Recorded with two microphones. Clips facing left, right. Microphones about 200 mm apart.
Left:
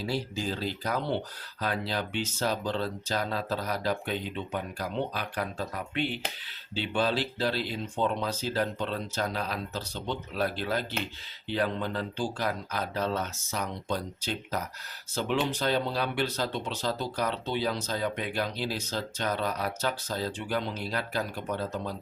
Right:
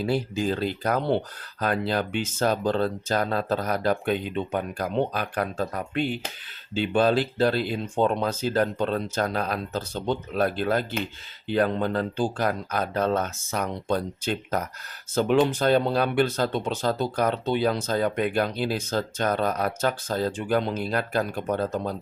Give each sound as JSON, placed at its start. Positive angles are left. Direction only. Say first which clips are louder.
{"t": 0.0, "sound": "speech", "louder": "right 6 dB", "side_deg": -55}